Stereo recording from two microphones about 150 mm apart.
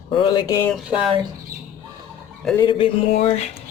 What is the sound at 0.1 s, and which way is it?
Speech, 35° left (ahead or behind).